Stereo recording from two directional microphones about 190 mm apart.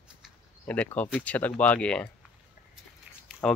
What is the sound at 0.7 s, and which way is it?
Speech, 10° left (ahead or behind).